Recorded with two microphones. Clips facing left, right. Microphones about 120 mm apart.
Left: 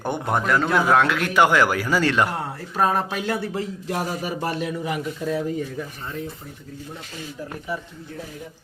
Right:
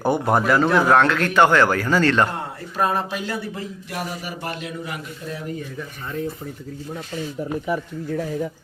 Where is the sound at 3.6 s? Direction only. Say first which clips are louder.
Left 4 dB; 90° left.